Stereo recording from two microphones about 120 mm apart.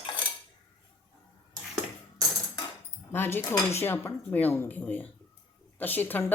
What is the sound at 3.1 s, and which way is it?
Speech, 20° left (ahead or behind).